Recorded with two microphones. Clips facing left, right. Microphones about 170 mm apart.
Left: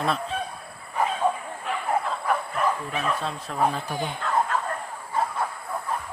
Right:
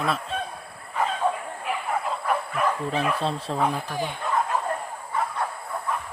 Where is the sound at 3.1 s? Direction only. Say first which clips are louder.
Right 3 dB; 30° right (ahead or behind).